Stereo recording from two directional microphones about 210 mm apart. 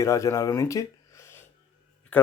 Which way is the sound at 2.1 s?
5° left (ahead or behind).